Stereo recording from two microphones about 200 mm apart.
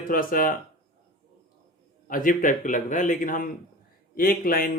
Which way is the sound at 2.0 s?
45° left (ahead or behind).